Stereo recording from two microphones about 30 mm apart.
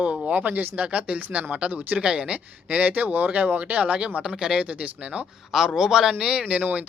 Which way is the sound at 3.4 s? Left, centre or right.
Right.